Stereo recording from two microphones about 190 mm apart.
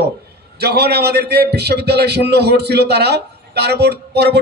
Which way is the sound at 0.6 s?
60° right (ahead or behind).